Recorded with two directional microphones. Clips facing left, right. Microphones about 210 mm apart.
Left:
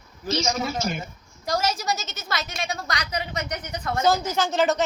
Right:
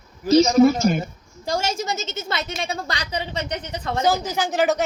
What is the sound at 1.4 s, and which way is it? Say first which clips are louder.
A woman's voice: right 1 dB; 30° right (ahead or behind).